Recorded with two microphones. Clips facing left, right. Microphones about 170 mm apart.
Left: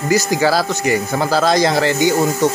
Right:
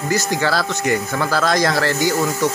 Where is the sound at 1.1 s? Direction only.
30° left (ahead or behind).